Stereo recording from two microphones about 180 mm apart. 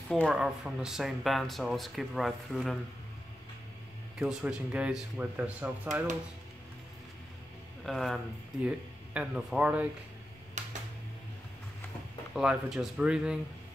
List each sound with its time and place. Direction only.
0.1 s speech: centre (ahead or behind)
4.2 s speech: 5° right (ahead or behind)
7.8 s speech: centre (ahead or behind)
10.6 s a sound: 40° right (ahead or behind)
12.4 s speech: 5° right (ahead or behind)